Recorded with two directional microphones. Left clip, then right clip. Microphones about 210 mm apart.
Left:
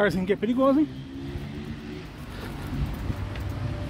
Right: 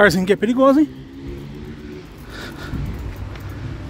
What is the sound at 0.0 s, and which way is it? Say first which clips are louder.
Speech: right 10 dB; 40° right (ahead or behind).